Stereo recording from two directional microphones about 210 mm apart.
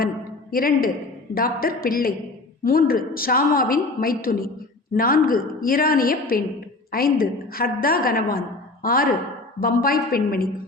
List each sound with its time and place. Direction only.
0.5 s a woman's voice: 45° left (ahead or behind)